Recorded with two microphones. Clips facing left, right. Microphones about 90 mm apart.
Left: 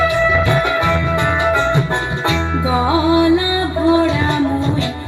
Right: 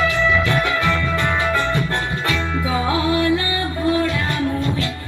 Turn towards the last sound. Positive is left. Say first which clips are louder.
# left 6 dB
turn(degrees=20)  # may be behind; listen again after turning